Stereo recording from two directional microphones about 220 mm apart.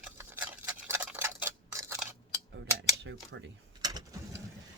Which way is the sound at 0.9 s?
10° right (ahead or behind).